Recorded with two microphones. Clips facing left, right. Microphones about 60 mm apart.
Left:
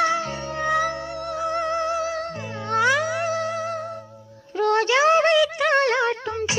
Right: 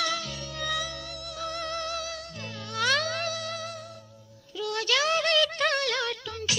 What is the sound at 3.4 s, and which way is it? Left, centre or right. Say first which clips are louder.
Music: left 10 dB; left.